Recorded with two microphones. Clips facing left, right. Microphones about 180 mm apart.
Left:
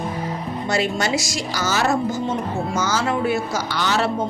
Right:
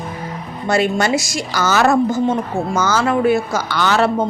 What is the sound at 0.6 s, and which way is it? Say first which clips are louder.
A woman's voice: right 6 dB; 55° right (ahead or behind).